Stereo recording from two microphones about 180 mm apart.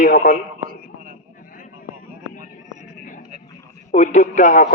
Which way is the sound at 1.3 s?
50° left (ahead or behind).